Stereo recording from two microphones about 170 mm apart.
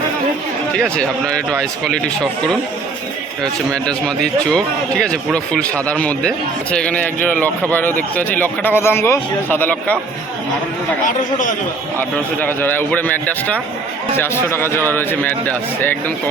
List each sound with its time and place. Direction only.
3.7 s speech: 5° left (ahead or behind)
11.0 s speech: 50° left (ahead or behind)
11.9 s speech: 10° left (ahead or behind)